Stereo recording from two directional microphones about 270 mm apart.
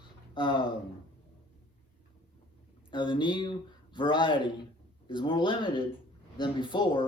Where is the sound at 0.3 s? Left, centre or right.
Centre.